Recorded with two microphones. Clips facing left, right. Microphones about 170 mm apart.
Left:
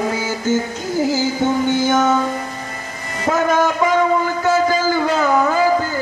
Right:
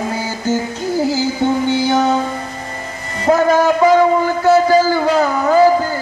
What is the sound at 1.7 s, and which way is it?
Music, 45° left (ahead or behind).